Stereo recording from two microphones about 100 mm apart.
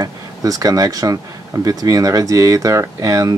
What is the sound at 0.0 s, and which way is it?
Speech, 35° right (ahead or behind).